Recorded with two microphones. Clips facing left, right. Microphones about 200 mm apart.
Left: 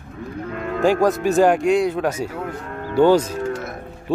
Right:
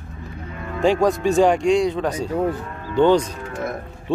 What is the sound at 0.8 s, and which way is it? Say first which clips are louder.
Speech: even; 5° left (ahead or behind).